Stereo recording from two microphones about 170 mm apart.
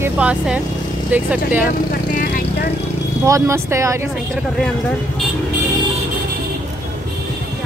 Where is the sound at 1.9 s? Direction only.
60° left (ahead or behind).